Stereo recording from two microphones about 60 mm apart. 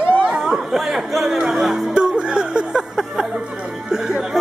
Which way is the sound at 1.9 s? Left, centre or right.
Centre.